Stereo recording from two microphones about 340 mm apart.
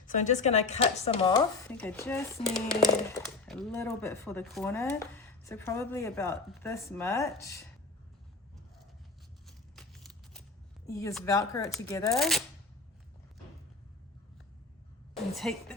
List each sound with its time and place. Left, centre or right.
0.1 s speech: left
9.5 s a sound: centre
10.8 s speech: centre
15.4 s a woman's voice: centre